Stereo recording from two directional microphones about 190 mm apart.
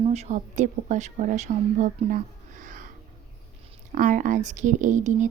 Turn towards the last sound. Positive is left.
turn(degrees=-40)  # may be behind; listen again after turning